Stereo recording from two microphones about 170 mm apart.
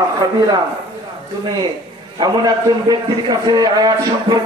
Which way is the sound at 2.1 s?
25° right (ahead or behind).